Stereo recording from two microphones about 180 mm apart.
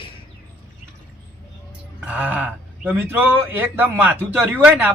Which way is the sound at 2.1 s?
10° right (ahead or behind).